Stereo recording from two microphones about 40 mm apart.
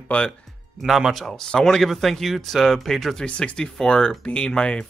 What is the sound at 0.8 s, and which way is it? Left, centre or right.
Speech, centre.